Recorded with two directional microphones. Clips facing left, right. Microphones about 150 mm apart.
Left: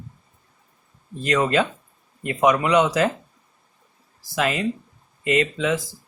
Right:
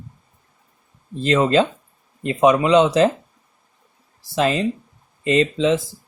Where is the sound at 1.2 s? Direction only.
30° right (ahead or behind).